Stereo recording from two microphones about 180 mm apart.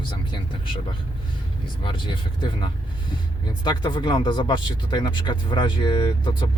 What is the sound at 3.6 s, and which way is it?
Speech, 25° left (ahead or behind).